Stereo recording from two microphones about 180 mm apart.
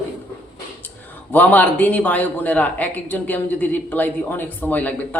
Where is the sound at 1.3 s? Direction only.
10° left (ahead or behind).